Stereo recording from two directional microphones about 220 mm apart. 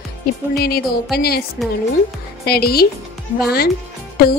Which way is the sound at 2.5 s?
45° left (ahead or behind).